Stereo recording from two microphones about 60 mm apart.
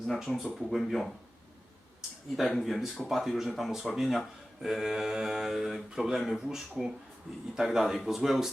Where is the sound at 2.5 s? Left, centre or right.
Centre.